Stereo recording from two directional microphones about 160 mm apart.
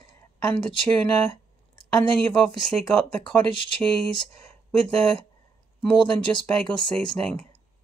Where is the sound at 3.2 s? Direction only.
30° left (ahead or behind).